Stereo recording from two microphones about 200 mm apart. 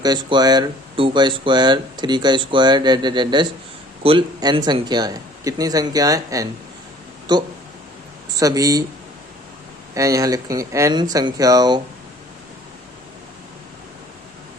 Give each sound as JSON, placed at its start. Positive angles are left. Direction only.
{"t": 0.0, "sound": "speech", "side_deg": -20}
{"t": 9.9, "sound": "speech", "side_deg": -15}